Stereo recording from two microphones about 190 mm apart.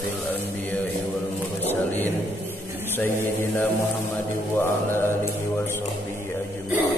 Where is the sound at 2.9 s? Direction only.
10° left (ahead or behind).